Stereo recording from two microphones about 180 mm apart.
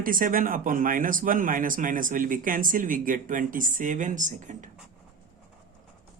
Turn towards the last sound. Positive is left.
turn(degrees=-45)  # may be behind; listen again after turning